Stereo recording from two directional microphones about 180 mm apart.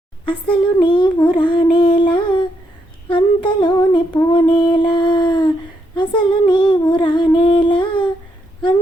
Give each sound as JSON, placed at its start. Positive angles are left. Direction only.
{"t": 0.5, "sound": "child singing", "side_deg": 25}
{"t": 3.1, "sound": "humming", "side_deg": 30}
{"t": 6.0, "sound": "child singing", "side_deg": 25}